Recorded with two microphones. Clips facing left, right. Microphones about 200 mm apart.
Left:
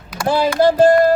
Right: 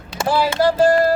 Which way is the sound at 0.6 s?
20° left (ahead or behind).